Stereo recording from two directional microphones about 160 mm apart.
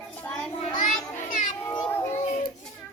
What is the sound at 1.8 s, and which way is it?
Children playing, 10° left (ahead or behind).